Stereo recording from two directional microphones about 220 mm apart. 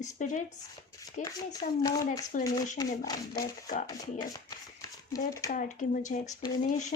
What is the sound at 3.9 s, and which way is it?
A child's voice, 15° left (ahead or behind).